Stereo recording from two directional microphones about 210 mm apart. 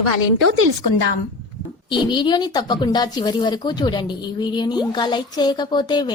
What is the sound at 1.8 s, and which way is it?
Speech, 20° left (ahead or behind).